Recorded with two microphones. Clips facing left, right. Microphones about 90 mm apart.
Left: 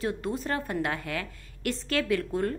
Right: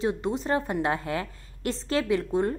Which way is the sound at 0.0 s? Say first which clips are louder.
Right 3 dB; 20° right (ahead or behind).